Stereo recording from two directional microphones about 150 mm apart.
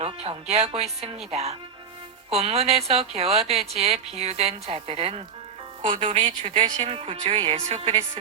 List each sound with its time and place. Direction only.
0.0 s a woman's voice: 40° right (ahead or behind)